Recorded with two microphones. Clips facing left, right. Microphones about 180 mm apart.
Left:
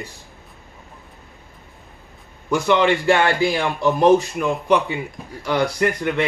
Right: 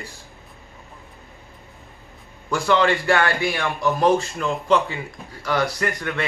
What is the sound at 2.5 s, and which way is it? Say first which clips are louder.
A man's voice: left 2 dB; 20° left (ahead or behind).